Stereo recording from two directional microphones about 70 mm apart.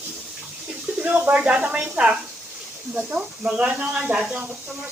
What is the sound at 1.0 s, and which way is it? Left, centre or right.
Speech, centre.